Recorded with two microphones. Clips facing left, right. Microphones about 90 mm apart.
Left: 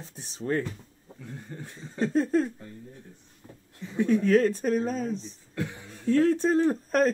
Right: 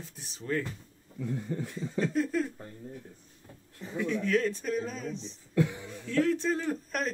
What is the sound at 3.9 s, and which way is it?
Speech, 40° left (ahead or behind).